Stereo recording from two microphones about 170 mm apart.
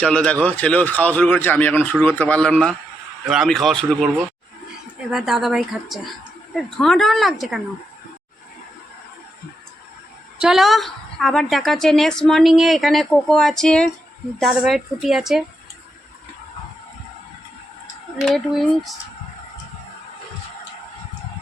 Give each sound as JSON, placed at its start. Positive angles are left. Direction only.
{"t": 0.0, "sound": "a man's voice", "side_deg": 5}
{"t": 5.1, "sound": "a woman's voice", "side_deg": 0}
{"t": 10.4, "sound": "a woman's voice", "side_deg": 0}
{"t": 18.3, "sound": "a woman's voice", "side_deg": 0}